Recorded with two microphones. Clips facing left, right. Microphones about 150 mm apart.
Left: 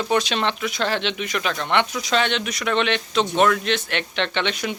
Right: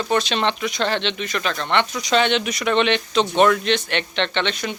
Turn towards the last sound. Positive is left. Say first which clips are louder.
# right 1 dB
turn(degrees=10)  # may be behind; listen again after turning